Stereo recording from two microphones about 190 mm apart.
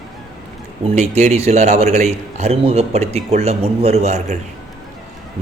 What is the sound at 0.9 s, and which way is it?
A man's voice, 35° right (ahead or behind).